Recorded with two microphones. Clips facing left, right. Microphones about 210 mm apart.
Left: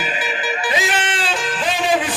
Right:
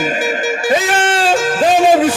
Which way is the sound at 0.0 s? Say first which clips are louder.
Right 8 dB; 45° right (ahead or behind).